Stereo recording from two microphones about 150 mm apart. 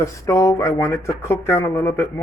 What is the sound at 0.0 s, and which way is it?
A woman's voice, 25° left (ahead or behind).